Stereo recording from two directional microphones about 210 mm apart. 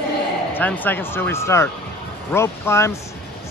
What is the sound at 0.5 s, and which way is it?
Speech, 10° left (ahead or behind).